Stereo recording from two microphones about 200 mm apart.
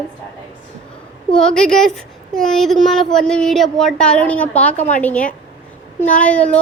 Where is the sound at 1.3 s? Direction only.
5° left (ahead or behind).